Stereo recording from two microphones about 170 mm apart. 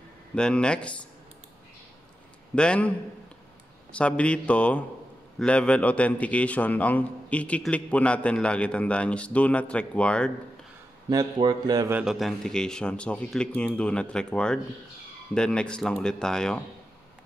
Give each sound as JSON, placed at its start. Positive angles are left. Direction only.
{"t": 0.3, "sound": "speech", "side_deg": 5}
{"t": 2.5, "sound": "speech", "side_deg": 5}
{"t": 3.9, "sound": "a man's voice", "side_deg": 5}
{"t": 11.1, "sound": "a man's voice", "side_deg": -25}
{"t": 11.9, "sound": "speech", "side_deg": -5}